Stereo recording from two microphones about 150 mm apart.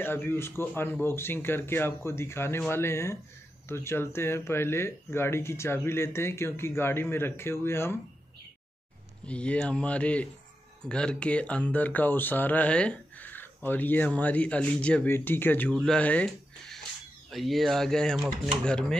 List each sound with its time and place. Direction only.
0.0 s speech: 15° left (ahead or behind)
9.2 s speech: 5° left (ahead or behind)